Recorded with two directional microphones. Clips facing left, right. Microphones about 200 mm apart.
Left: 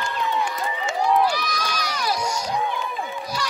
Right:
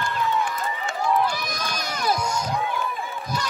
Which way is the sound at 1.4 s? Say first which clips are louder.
Left 2 dB; 50° right (ahead or behind).